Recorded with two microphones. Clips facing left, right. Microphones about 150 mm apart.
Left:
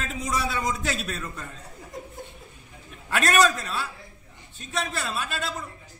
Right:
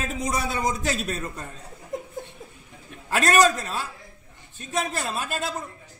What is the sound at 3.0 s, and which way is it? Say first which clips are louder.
A man's voice: right 2 dB; 40° right (ahead or behind).